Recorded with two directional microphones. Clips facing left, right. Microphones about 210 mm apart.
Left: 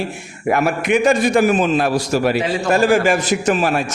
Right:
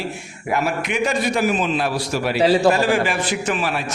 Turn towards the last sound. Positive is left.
turn(degrees=45)  # may be behind; listen again after turning